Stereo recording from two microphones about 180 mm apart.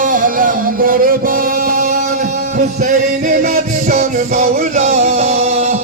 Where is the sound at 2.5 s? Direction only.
45° right (ahead or behind).